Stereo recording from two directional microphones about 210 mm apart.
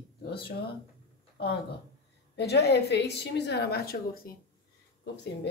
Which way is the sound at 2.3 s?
50° left (ahead or behind).